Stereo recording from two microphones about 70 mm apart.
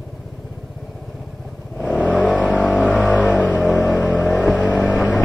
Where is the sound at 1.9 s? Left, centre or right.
Centre.